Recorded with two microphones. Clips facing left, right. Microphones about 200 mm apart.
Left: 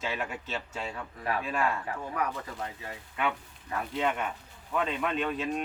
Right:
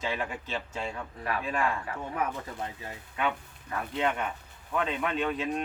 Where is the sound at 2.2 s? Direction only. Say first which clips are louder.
Right 1 dB; 20° right (ahead or behind).